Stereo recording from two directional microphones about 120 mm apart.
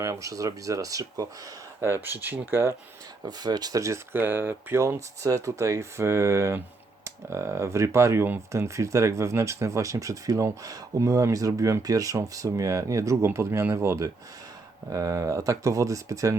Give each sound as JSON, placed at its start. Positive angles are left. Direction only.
{"t": 0.0, "sound": "speech", "side_deg": -25}
{"t": 1.8, "sound": "speech", "side_deg": -20}
{"t": 3.2, "sound": "speech", "side_deg": -35}